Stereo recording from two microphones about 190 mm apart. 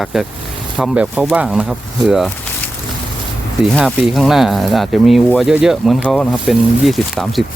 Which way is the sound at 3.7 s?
Centre (ahead or behind).